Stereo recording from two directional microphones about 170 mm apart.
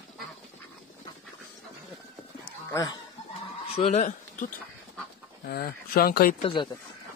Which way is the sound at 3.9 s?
45° left (ahead or behind).